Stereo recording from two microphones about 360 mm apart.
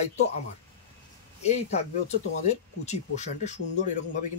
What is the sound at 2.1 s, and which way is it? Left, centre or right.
Speech, centre.